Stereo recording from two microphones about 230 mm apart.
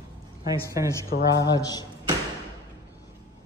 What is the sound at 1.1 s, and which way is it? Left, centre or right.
Speech, left.